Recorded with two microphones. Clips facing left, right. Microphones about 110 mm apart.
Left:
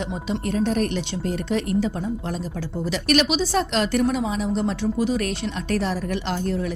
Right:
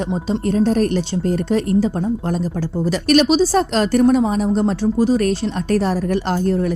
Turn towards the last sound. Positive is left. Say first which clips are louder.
# right 7 dB
turn(degrees=-45)  # may be behind; listen again after turning